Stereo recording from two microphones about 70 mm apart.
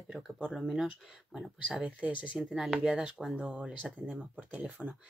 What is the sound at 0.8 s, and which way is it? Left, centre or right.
Speech, centre.